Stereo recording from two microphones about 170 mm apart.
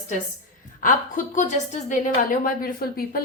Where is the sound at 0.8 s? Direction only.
50° left (ahead or behind).